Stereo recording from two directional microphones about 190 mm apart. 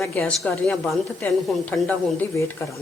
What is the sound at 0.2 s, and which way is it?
A woman's voice, 5° left (ahead or behind).